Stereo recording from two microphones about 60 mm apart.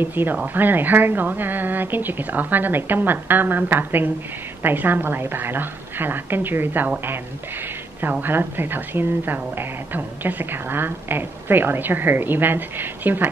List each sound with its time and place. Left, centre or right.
0.0 s speech: right
8.0 s speech: right